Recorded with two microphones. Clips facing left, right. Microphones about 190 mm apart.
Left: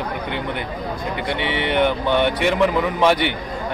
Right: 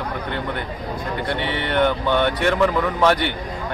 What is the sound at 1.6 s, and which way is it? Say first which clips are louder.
A man's voice: left 1 dB; 15° left (ahead or behind).